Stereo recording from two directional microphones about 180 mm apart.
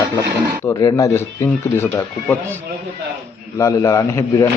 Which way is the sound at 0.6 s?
20° left (ahead or behind).